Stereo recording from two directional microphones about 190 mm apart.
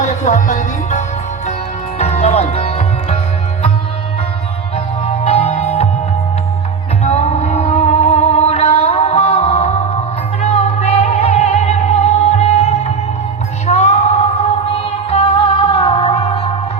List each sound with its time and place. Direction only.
0.0 s music: 40° left (ahead or behind)
5.0 s music: 30° left (ahead or behind)
7.0 s music: 35° left (ahead or behind)